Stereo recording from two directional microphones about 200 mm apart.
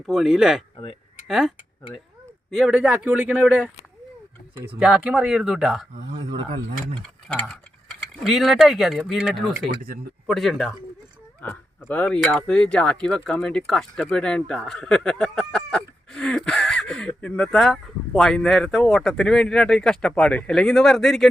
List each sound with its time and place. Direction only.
0.0 s speech: centre (ahead or behind)
4.8 s speech: 5° right (ahead or behind)
6.2 s speech: 35° right (ahead or behind)
7.0 s speech: 5° left (ahead or behind)
9.8 s speech: 45° right (ahead or behind)
10.2 s speech: centre (ahead or behind)